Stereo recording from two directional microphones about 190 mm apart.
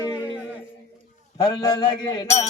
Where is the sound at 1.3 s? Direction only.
20° left (ahead or behind).